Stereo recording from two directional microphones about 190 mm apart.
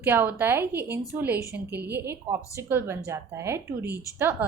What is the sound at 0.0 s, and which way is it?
A woman's voice, 10° right (ahead or behind).